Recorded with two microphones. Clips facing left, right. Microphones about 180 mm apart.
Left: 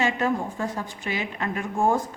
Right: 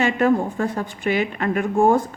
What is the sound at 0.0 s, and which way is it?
A woman's voice, 60° right (ahead or behind).